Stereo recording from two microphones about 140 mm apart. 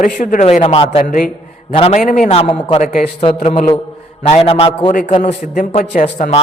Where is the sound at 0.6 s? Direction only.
45° left (ahead or behind).